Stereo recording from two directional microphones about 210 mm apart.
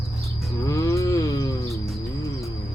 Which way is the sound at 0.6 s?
15° left (ahead or behind).